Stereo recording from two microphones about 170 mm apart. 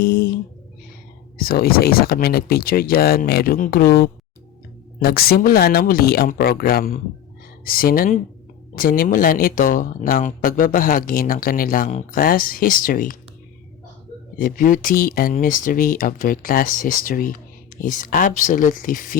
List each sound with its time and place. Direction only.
0.0 s music: 65° left (ahead or behind)
1.4 s speech: 60° left (ahead or behind)
14.3 s speech: 55° left (ahead or behind)